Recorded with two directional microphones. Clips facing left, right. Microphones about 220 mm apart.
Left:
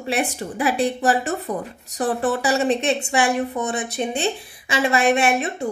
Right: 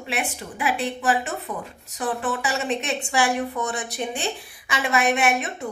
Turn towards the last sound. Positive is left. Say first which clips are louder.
# left 3 dB
turn(degrees=30)  # may be behind; listen again after turning